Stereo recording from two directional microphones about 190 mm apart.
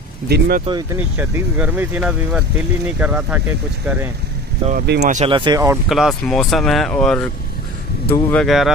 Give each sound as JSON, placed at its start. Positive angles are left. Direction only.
{"t": 0.3, "sound": "speech", "side_deg": -50}
{"t": 1.1, "sound": "speech", "side_deg": -10}
{"t": 5.0, "sound": "speech", "side_deg": -40}
{"t": 5.3, "sound": "speech", "side_deg": -25}
{"t": 5.9, "sound": "speech", "side_deg": 0}